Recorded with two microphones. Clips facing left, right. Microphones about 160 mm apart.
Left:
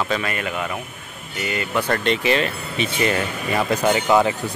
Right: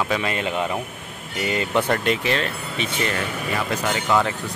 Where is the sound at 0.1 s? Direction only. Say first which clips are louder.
Right 1 dB; 20° right (ahead or behind).